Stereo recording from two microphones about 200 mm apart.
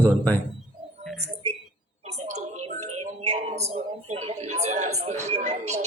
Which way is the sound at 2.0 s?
30° right (ahead or behind).